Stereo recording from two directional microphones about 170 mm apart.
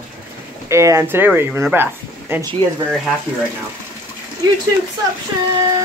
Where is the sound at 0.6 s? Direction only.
15° right (ahead or behind).